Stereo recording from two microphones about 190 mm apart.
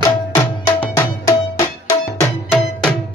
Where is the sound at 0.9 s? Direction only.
15° left (ahead or behind).